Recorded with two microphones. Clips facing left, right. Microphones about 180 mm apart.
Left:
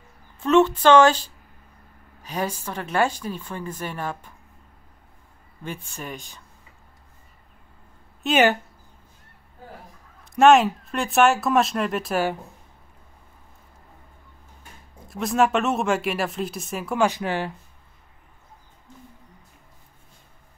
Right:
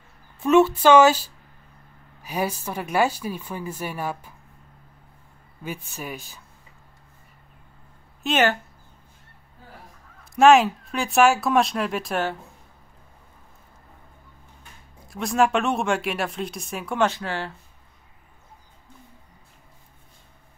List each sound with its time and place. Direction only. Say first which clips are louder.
0.4 s a woman's voice: right 1 dB; 10° right (ahead or behind)
5.6 s speech: right 1 dB; 5° right (ahead or behind)
8.2 s speech: left 2 dB; centre (ahead or behind)
10.3 s speech: even; centre (ahead or behind)
15.0 s speech: even; centre (ahead or behind)
17.1 s speech: left 4 dB; 15° left (ahead or behind)